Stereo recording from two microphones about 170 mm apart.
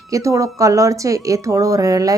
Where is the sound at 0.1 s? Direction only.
20° right (ahead or behind).